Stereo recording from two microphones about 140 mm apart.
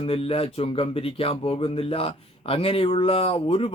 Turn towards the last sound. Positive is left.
turn(degrees=40)  # may be behind; listen again after turning